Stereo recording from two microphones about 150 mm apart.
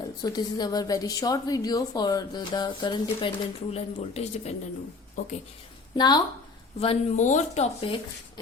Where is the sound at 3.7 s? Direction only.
45° left (ahead or behind).